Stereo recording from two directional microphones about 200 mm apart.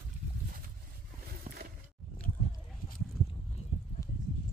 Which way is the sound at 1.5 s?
35° right (ahead or behind).